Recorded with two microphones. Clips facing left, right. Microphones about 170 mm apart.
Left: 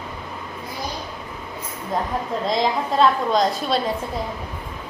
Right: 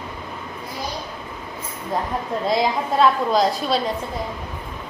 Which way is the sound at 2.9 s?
5° right (ahead or behind).